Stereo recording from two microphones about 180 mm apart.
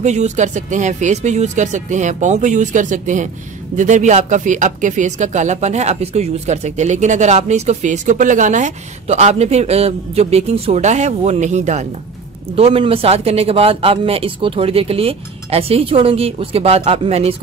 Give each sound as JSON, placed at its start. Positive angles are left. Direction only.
{"t": 0.0, "sound": "speech", "side_deg": -40}